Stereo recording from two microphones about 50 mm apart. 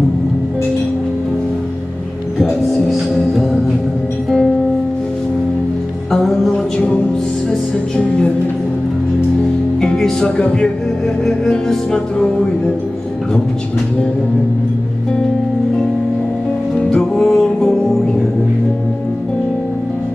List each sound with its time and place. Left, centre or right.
6.2 s music: centre
9.8 s music: centre
10.3 s speech: left
11.2 s music: centre
16.7 s music: centre